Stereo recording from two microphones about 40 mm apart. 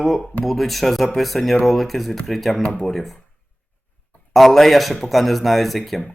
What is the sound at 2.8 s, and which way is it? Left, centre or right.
Speech, centre.